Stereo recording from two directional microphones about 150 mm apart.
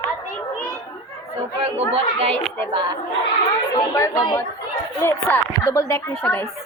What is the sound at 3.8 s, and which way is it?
Speech, 20° left (ahead or behind).